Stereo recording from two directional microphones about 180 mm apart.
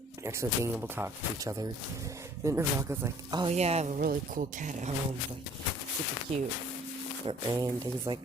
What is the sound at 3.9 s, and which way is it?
Speech, 50° right (ahead or behind).